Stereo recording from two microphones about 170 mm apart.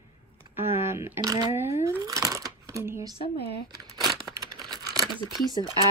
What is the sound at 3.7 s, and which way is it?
Crumpling, 25° right (ahead or behind).